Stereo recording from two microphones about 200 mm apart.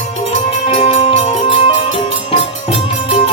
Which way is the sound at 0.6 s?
25° left (ahead or behind).